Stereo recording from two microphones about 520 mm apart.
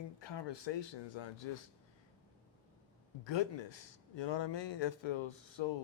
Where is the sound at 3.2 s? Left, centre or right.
Left.